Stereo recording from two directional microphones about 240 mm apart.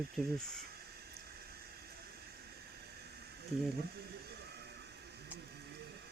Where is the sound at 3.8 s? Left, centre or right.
Right.